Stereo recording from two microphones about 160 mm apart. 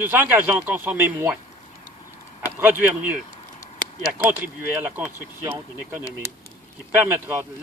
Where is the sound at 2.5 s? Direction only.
10° right (ahead or behind).